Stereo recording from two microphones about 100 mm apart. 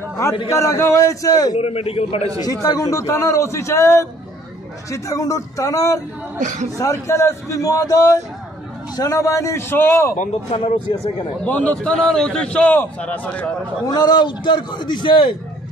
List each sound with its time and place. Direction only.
0.5 s a man's voice: 30° left (ahead or behind)
1.6 s a man's voice: 80° left
2.6 s a man's voice: 40° left (ahead or behind)
10.5 s speech: 65° left (ahead or behind)
11.4 s a man's voice: 15° left (ahead or behind)
13.8 s a man's voice: 40° left (ahead or behind)